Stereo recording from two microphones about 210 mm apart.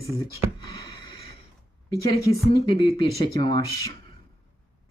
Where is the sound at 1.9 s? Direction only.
15° left (ahead or behind).